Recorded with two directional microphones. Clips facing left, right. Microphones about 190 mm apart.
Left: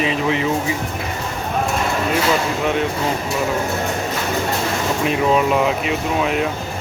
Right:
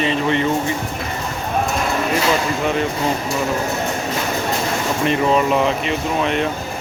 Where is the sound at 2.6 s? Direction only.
Centre (ahead or behind).